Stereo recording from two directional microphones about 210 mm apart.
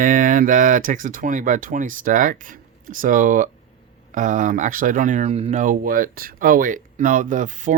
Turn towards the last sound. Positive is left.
turn(degrees=-35)  # may be behind; listen again after turning